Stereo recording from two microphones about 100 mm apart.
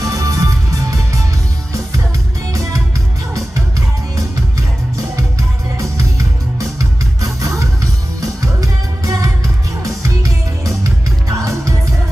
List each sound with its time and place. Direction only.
0.0 s music: 35° right (ahead or behind)
2.5 s music: 30° right (ahead or behind)
5.8 s music: 30° right (ahead or behind)